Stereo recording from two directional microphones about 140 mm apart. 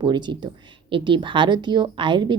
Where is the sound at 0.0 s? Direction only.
35° right (ahead or behind).